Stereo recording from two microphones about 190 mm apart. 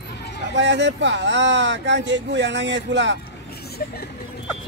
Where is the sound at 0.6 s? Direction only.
65° right (ahead or behind).